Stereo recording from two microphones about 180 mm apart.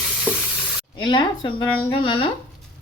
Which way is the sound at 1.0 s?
25° left (ahead or behind).